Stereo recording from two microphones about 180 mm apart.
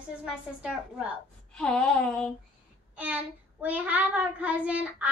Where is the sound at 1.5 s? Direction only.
5° left (ahead or behind).